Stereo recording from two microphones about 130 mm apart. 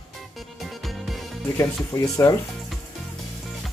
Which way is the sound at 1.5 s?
20° left (ahead or behind).